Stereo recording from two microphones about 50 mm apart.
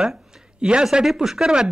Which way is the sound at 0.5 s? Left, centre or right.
Centre.